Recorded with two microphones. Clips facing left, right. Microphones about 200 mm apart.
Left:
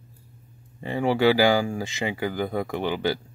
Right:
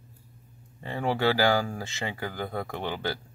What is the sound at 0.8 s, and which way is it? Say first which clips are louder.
Speech: left 6 dB; 15° left (ahead or behind).